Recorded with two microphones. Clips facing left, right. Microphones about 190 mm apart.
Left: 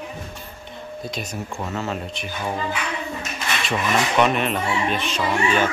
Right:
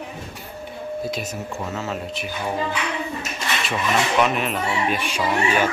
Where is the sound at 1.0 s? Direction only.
5° right (ahead or behind).